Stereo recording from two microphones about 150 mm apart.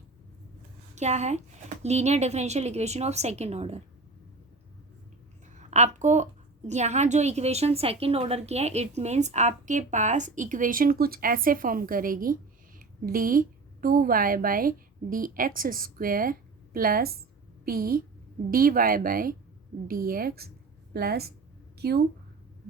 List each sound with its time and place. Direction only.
0.9 s a woman's voice: 50° right (ahead or behind)
5.5 s a woman's voice: 50° right (ahead or behind); by 22.0 s 90° right